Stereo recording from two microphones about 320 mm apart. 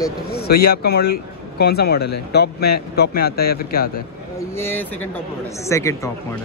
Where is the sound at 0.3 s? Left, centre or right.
Left.